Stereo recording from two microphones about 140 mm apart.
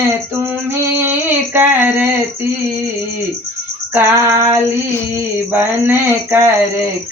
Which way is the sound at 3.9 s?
20° right (ahead or behind).